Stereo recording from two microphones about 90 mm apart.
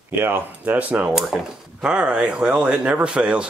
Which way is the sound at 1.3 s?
5° right (ahead or behind).